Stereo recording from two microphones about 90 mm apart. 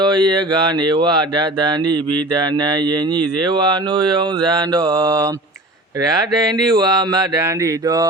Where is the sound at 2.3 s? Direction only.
55° right (ahead or behind).